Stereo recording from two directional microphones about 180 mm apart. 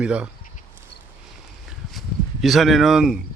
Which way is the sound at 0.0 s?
5° right (ahead or behind).